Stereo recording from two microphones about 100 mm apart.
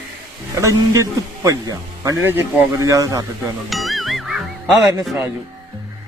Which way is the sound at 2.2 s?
25° right (ahead or behind).